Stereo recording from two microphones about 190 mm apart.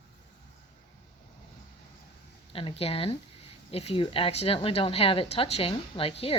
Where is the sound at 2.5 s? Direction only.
30° left (ahead or behind).